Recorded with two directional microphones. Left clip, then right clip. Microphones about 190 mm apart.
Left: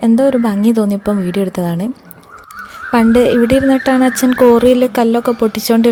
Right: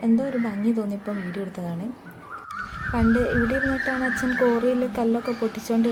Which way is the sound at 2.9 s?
55° left (ahead or behind).